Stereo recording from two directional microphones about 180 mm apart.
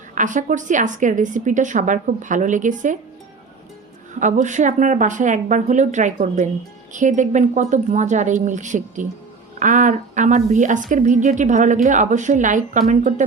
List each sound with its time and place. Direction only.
0.1 s a woman's voice: 45° right (ahead or behind)
4.2 s a woman's voice: 40° right (ahead or behind)